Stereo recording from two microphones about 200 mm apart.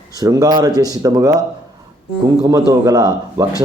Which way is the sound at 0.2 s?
15° right (ahead or behind).